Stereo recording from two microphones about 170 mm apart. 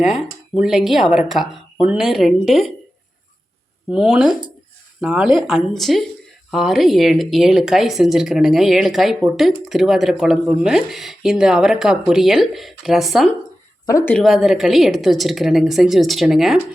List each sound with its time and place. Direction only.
0.0 s speech: centre (ahead or behind)
3.8 s speech: 5° right (ahead or behind)
13.9 s speech: 10° left (ahead or behind)